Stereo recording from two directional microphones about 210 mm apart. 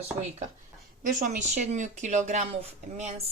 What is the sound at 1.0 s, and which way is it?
Speech, 40° right (ahead or behind).